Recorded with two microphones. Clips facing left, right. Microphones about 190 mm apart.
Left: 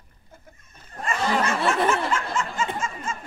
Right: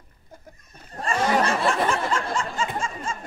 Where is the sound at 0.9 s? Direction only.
35° right (ahead or behind).